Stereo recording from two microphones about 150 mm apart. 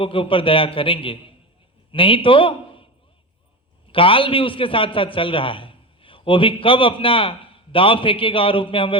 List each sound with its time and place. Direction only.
0.0 s a man's voice: 35° left (ahead or behind)
3.9 s a man's voice: 35° left (ahead or behind)